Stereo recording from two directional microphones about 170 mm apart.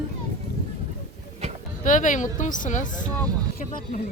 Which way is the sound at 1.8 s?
50° left (ahead or behind).